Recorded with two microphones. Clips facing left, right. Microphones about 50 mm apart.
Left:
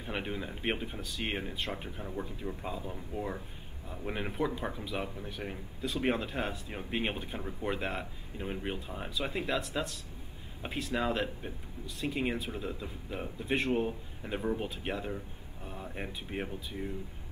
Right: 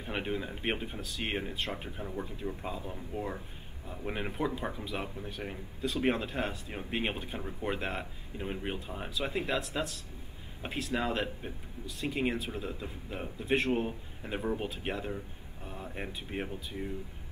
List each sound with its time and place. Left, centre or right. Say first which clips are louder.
0.0 s speech: right 2 dB; centre